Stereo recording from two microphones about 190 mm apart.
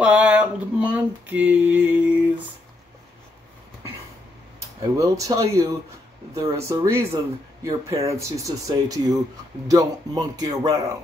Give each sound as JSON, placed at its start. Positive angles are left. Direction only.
{"t": 0.0, "sound": "a sound", "side_deg": -5}
{"t": 4.6, "sound": "speech", "side_deg": -15}
{"t": 7.9, "sound": "speech", "side_deg": -30}
{"t": 8.2, "sound": "a man's voice", "side_deg": -20}